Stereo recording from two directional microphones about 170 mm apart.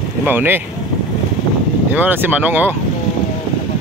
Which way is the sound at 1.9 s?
10° right (ahead or behind).